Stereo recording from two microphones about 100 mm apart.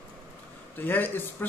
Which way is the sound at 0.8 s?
20° left (ahead or behind).